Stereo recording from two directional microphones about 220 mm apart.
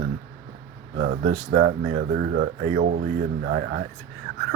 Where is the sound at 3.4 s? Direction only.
50° right (ahead or behind).